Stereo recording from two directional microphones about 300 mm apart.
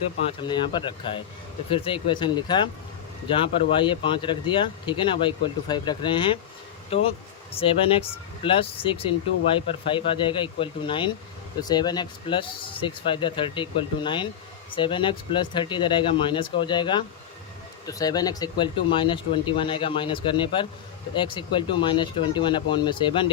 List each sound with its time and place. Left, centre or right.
0.3 s speech: centre